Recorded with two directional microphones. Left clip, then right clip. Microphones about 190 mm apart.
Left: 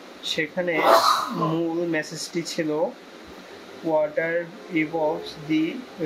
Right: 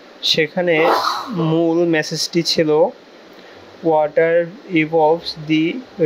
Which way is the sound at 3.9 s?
50° right (ahead or behind).